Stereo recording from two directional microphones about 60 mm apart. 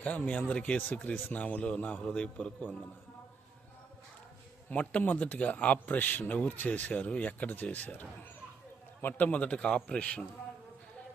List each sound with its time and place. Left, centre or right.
0.0 s speech: left
4.7 s speech: left